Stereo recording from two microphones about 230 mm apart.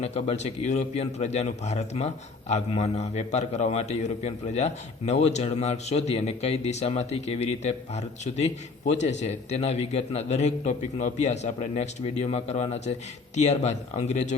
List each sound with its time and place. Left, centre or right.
0.0 s a man's voice: left